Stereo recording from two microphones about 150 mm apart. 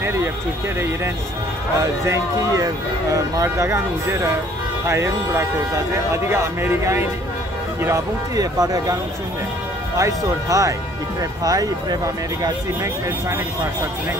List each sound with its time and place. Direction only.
1.8 s speech: 20° right (ahead or behind)
9.9 s speech: 20° right (ahead or behind)